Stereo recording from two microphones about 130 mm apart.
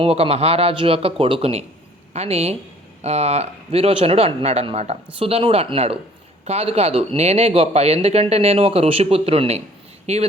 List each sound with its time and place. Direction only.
0.0 s speech: 50° right (ahead or behind)